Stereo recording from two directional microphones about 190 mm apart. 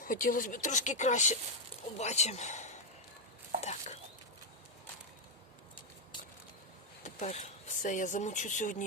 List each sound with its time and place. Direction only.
0.0 s a man's voice: 45° left (ahead or behind)
3.6 s stir: 35° left (ahead or behind)
7.0 s speech: 40° left (ahead or behind)